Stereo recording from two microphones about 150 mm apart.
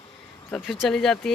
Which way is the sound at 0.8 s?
5° left (ahead or behind).